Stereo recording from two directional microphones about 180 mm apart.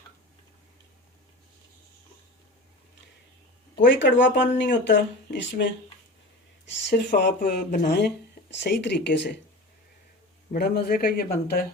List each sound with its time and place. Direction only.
3.8 s speech: 90° left
7.1 s speech: 55° left (ahead or behind)
10.5 s speech: 60° left (ahead or behind)